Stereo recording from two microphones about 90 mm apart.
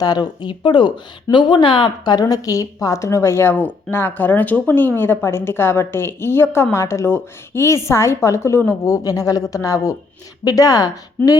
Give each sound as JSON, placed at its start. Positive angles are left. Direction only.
{"t": 0.0, "sound": "a woman's voice", "side_deg": 50}
{"t": 11.2, "sound": "speech", "side_deg": 20}